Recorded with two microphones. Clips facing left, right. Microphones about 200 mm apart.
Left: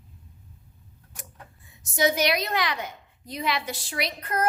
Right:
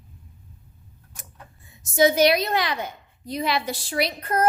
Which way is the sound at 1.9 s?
30° right (ahead or behind).